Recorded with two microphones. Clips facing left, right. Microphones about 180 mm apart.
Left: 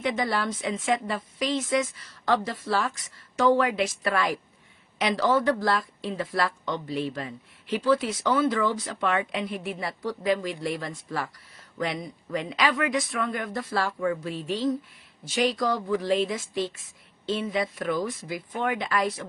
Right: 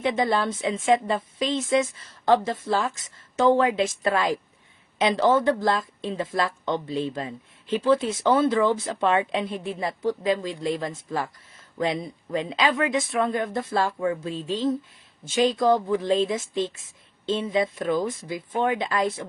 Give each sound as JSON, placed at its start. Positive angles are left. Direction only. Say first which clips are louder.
{"t": 0.0, "sound": "a woman's voice", "louder": "right 4 dB", "side_deg": -25}